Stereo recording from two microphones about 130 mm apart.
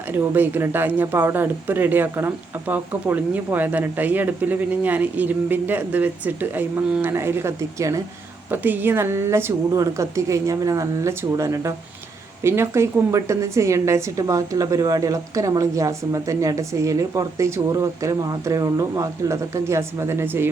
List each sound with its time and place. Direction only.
0.1 s a woman's voice: 15° right (ahead or behind)